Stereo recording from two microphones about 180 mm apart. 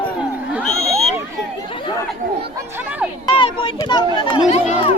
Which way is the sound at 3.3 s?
30° left (ahead or behind).